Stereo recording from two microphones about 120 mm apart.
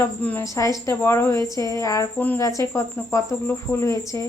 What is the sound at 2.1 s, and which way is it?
Speech, 15° left (ahead or behind).